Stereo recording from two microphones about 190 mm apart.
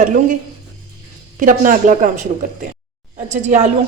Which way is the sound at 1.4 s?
45° right (ahead or behind).